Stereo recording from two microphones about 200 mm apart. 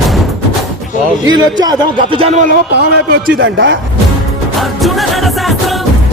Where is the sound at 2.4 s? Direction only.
50° right (ahead or behind).